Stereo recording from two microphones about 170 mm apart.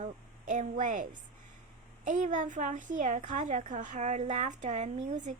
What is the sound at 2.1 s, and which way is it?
A woman's voice, 50° right (ahead or behind).